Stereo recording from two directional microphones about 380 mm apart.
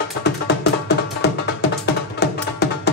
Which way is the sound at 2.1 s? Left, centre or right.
Left.